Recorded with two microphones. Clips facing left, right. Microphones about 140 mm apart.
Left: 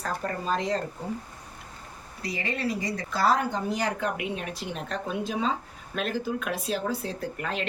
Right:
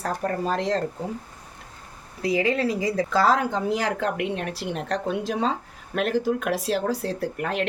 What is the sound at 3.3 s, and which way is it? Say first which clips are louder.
Speech: right 3 dB; 90° right.